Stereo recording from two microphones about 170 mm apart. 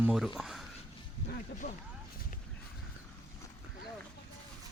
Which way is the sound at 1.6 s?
50° left (ahead or behind).